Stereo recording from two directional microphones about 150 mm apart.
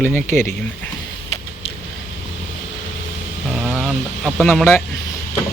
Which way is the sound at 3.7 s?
Centre (ahead or behind).